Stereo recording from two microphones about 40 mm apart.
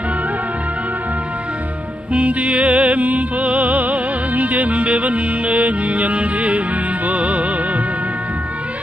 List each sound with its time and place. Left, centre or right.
2.1 s music: right